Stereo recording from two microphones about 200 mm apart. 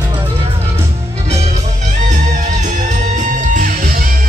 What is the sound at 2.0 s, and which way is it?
Music, 35° right (ahead or behind).